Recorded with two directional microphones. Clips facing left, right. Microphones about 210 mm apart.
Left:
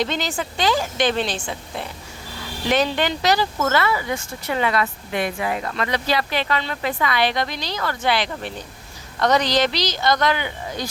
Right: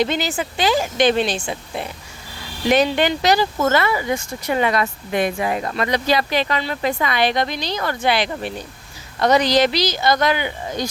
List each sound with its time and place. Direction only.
0.0 s speech: 10° right (ahead or behind); by 5.9 s 30° right (ahead or behind)
5.9 s speech: 15° right (ahead or behind)